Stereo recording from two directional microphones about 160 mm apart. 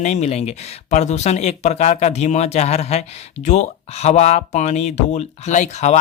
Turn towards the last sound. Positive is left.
turn(degrees=45)  # may be behind; listen again after turning